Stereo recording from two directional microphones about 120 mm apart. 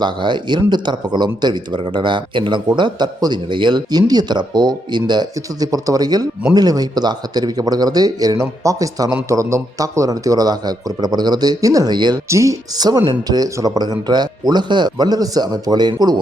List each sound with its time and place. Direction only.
0.0 s speech: 40° right (ahead or behind)
12.3 s speech: 25° right (ahead or behind)